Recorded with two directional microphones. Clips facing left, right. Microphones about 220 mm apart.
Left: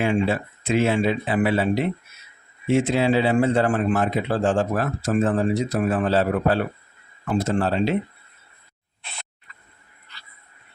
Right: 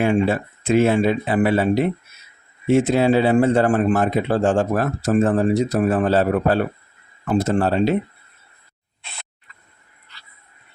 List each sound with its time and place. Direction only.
0.0 s a man's voice: 45° right (ahead or behind)